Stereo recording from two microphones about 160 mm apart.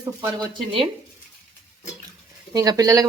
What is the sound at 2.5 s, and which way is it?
Speech, 25° right (ahead or behind).